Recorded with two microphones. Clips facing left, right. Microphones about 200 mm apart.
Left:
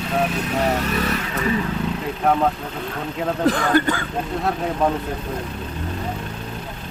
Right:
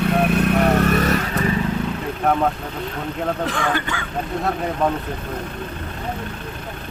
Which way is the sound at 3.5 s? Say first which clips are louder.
Left 5 dB; 40° left (ahead or behind).